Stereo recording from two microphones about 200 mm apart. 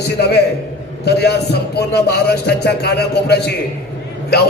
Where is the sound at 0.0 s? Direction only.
55° left (ahead or behind).